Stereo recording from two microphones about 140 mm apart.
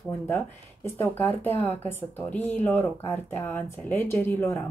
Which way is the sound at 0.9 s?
15° left (ahead or behind).